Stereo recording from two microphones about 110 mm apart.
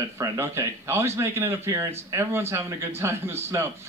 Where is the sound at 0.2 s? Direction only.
25° right (ahead or behind).